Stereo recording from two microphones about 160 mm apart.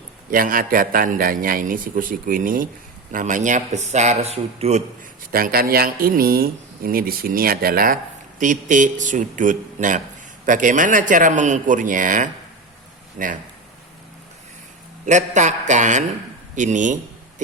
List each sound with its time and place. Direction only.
0.3 s a man's voice: 60° right (ahead or behind); by 4.8 s 40° right (ahead or behind)
5.3 s speech: 70° right (ahead or behind)
8.4 s a man's voice: 50° right (ahead or behind)
15.0 s a man's voice: 50° right (ahead or behind)
16.6 s a sound: 50° right (ahead or behind)